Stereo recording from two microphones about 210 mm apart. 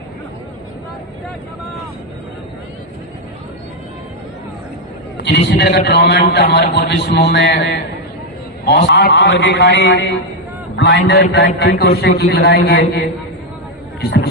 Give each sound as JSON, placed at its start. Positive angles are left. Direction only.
{"t": 5.1, "sound": "a man's voice", "side_deg": 55}
{"t": 14.0, "sound": "a man's voice", "side_deg": 50}